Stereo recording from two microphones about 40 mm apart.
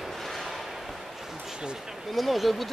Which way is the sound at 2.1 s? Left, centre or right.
Centre.